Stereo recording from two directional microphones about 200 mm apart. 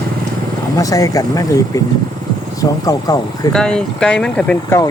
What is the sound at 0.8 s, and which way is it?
Speech, 15° left (ahead or behind).